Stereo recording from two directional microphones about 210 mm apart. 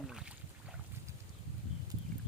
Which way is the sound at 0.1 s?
5° right (ahead or behind).